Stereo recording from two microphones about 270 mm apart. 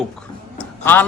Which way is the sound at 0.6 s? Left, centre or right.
Centre.